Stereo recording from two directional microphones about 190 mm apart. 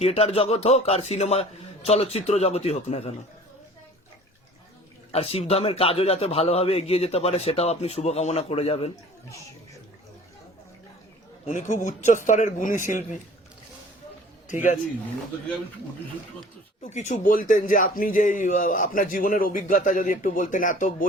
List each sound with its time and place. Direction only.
0.0 s a man's voice: 30° left (ahead or behind)
5.1 s a man's voice: 30° left (ahead or behind)
11.4 s a man's voice: 40° left (ahead or behind)
14.4 s a man's voice: 40° left (ahead or behind)
16.8 s a man's voice: 40° left (ahead or behind)